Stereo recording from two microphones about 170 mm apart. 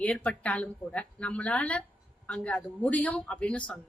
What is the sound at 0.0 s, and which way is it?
A woman's voice, 10° left (ahead or behind).